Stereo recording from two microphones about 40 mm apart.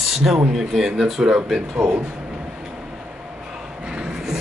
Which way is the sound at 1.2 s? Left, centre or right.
Centre.